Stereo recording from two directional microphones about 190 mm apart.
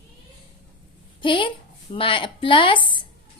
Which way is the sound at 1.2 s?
25° left (ahead or behind).